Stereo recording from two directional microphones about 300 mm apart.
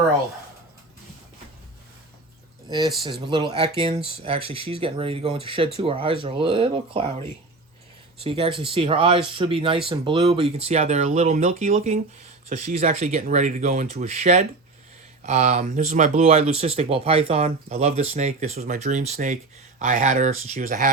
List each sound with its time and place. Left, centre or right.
3.0 s speech: centre